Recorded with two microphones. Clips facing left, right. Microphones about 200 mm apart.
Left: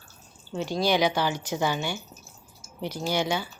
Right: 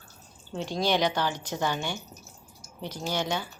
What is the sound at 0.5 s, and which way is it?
Speech, centre (ahead or behind).